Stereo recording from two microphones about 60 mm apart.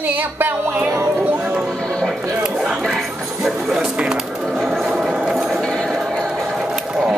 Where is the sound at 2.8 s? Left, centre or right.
Centre.